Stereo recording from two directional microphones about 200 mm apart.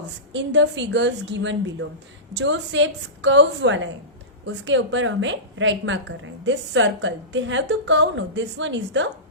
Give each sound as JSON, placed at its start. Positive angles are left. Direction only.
{"t": 0.3, "sound": "a woman's voice", "side_deg": -65}